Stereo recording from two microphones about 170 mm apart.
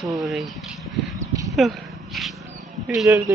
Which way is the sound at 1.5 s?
Centre (ahead or behind).